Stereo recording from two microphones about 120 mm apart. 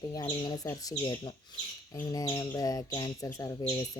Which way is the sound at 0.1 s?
35° left (ahead or behind).